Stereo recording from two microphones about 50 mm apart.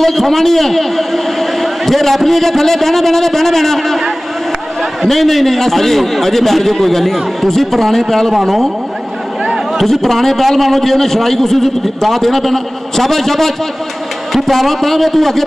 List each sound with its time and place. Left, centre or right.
0.0 s a man's voice: centre